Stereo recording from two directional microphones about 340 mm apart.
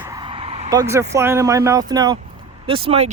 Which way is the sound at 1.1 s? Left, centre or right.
Centre.